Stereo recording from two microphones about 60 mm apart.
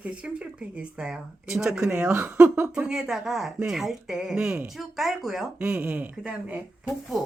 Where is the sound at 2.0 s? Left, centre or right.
Right; by 5.5 s centre.